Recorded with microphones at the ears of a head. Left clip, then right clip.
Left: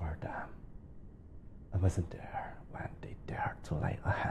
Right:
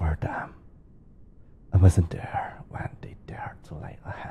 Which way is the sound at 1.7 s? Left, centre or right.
Right.